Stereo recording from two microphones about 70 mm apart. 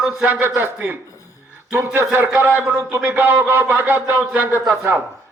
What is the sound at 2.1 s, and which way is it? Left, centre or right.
A man's voice, right.